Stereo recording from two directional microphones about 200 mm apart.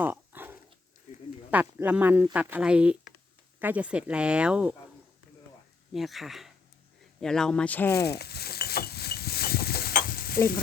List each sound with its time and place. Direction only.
0.0 s dog: 10° right (ahead or behind)
1.1 s a sound: 35° left (ahead or behind)
1.5 s speech: 10° right (ahead or behind)
5.9 s speech: centre (ahead or behind)
8.0 s stir: 55° left (ahead or behind)